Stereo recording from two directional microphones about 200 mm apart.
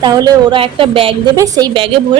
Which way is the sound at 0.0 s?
20° right (ahead or behind).